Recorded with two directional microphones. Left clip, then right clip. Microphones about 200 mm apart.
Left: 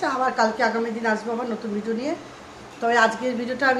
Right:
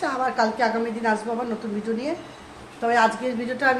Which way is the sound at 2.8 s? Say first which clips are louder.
Left 1 dB; 5° left (ahead or behind).